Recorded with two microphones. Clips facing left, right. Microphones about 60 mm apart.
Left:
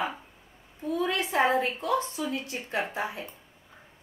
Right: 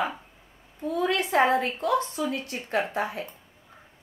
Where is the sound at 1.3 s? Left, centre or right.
Right.